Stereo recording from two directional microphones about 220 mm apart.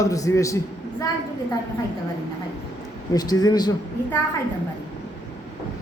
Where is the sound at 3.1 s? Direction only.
15° left (ahead or behind).